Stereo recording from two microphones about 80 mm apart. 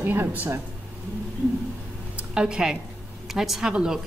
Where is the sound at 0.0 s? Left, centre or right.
Right.